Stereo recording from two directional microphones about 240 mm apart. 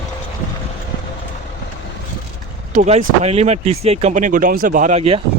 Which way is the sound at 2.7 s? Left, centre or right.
Right.